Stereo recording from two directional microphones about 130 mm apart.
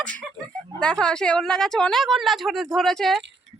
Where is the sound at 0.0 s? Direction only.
10° left (ahead or behind).